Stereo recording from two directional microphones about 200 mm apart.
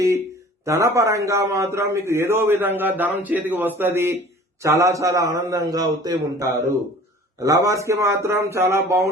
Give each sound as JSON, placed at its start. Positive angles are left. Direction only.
{"t": 0.6, "sound": "a man's voice", "side_deg": -15}